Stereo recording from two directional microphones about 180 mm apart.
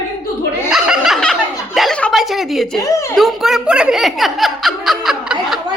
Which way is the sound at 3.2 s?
Centre (ahead or behind).